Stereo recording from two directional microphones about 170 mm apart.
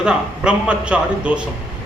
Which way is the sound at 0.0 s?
5° right (ahead or behind).